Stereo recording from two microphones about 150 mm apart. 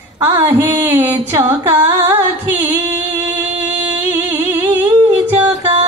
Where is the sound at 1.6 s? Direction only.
15° right (ahead or behind).